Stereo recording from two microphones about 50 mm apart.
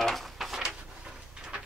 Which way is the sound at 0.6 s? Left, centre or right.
Centre.